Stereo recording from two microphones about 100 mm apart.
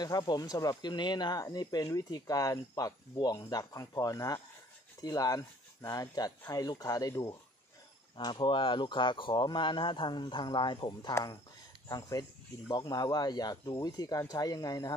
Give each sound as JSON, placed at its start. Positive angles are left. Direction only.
{"t": 0.0, "sound": "speech", "side_deg": 45}
{"t": 8.2, "sound": "speech", "side_deg": 50}